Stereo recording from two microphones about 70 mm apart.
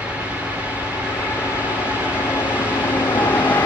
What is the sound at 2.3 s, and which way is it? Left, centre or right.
Vehicle, left.